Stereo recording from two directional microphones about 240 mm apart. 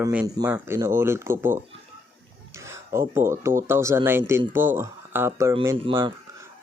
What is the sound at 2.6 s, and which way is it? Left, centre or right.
Speech, centre.